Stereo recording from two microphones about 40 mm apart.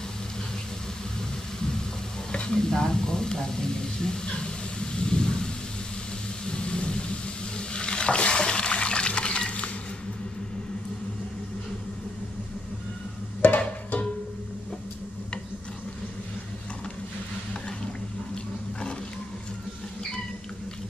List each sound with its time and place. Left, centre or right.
2.3 s speech: left
4.7 s a sound: left
6.4 s vehicle: left
7.5 s water: left
13.6 s music: left
18.3 s roaring cats: left